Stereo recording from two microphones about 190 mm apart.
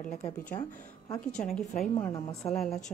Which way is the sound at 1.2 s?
5° left (ahead or behind).